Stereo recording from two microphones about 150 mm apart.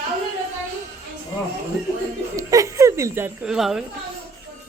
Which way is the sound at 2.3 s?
20° right (ahead or behind).